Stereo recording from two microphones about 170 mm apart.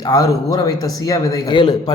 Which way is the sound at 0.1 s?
20° left (ahead or behind).